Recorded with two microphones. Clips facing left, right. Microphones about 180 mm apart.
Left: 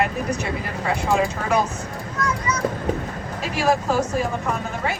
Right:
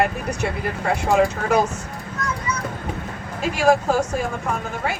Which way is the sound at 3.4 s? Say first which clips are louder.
Right 4 dB; 45° right (ahead or behind).